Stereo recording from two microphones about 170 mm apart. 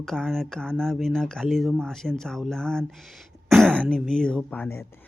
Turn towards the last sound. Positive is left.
turn(degrees=10)  # may be behind; listen again after turning